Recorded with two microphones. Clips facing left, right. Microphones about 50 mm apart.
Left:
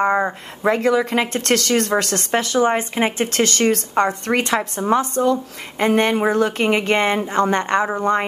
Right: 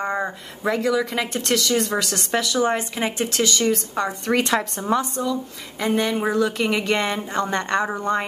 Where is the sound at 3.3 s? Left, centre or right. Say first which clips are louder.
Left 3 dB; left.